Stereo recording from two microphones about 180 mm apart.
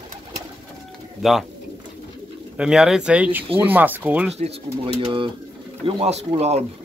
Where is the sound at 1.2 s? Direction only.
Centre (ahead or behind).